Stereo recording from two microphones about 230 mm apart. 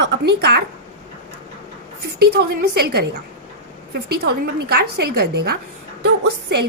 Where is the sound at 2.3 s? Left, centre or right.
Right.